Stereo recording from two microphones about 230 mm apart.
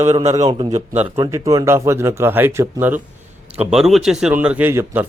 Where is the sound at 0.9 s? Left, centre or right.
Centre.